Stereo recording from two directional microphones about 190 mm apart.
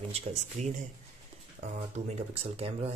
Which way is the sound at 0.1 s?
35° right (ahead or behind).